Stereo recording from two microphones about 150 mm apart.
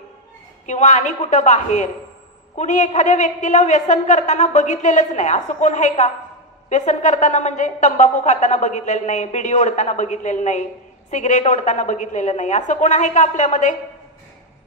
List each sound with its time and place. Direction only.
0.7 s a woman's voice: 55° left (ahead or behind)